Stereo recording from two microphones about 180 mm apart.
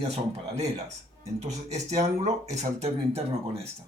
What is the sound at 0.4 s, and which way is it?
Speech, 35° right (ahead or behind).